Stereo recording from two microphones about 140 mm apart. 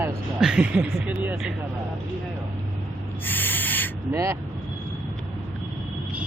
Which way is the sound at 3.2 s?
15° left (ahead or behind).